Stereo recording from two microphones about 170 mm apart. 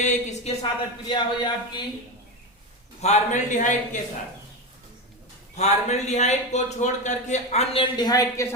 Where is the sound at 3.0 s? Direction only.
40° left (ahead or behind).